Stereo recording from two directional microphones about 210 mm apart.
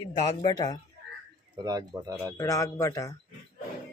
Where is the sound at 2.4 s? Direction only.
15° left (ahead or behind).